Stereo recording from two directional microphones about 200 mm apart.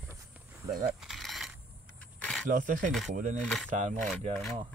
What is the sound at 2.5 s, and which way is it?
Speech, 40° right (ahead or behind).